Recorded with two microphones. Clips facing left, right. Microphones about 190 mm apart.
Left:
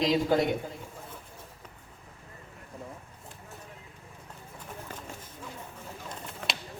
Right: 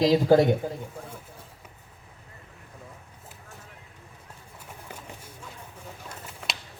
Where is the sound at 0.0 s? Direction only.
35° right (ahead or behind).